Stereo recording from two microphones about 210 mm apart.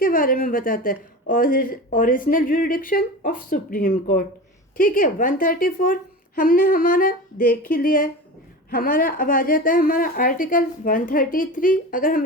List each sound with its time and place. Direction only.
0.0 s a woman's voice: 40° left (ahead or behind)